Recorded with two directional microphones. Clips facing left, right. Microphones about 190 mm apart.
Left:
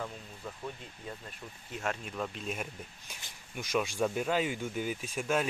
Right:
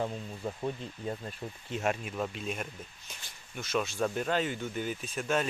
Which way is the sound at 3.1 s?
10° left (ahead or behind).